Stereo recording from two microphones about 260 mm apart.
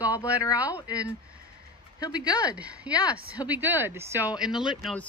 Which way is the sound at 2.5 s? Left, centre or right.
Centre.